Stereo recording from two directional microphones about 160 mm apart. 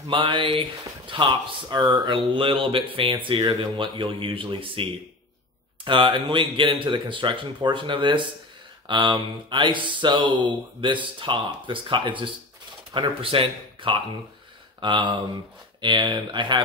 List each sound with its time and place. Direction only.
0.0 s speech: 30° right (ahead or behind)
5.9 s speech: 30° right (ahead or behind)